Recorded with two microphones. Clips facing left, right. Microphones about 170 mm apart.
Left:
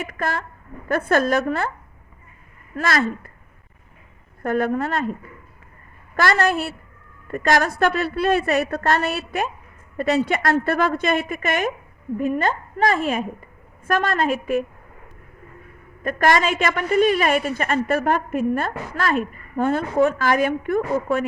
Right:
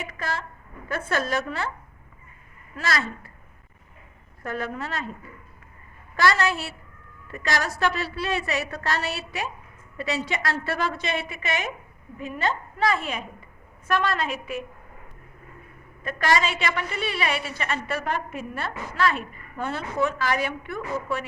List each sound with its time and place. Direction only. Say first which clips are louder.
0.0 s a woman's voice: left 5 dB; 50° left (ahead or behind)
2.7 s a woman's voice: left 6 dB; 55° left (ahead or behind)
4.4 s a woman's voice: left 9 dB; 50° left (ahead or behind)
6.1 s a woman's voice: left 3 dB; 50° left (ahead or behind)
16.0 s a woman's voice: left 5 dB; 50° left (ahead or behind)